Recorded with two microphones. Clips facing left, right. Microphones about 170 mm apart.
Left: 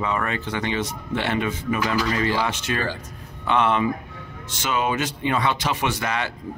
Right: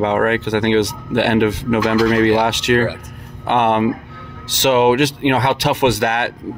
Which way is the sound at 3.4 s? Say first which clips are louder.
Right 5 dB; 60° right (ahead or behind).